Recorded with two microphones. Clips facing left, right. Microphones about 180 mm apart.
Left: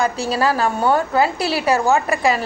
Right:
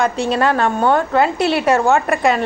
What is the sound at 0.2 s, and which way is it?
A woman's voice, 5° left (ahead or behind).